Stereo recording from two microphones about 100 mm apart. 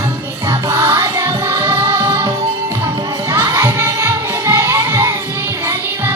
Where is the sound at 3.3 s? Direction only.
25° right (ahead or behind).